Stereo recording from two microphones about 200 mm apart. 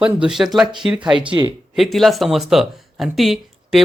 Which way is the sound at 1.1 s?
25° right (ahead or behind).